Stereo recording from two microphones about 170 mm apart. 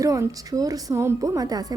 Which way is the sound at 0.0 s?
20° right (ahead or behind).